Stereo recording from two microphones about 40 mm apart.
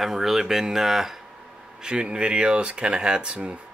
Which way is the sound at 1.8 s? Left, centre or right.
Right.